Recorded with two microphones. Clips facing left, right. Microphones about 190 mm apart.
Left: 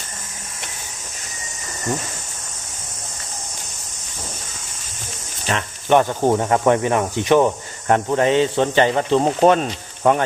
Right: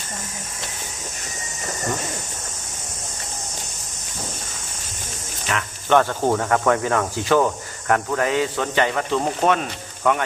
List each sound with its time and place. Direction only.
5.5 s cricket: 30° left (ahead or behind)
5.9 s speech: 15° left (ahead or behind); by 10.2 s 30° left (ahead or behind)